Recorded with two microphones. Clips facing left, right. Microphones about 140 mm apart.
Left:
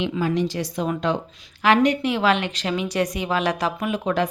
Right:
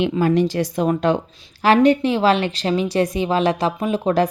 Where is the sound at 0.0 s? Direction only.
55° right (ahead or behind).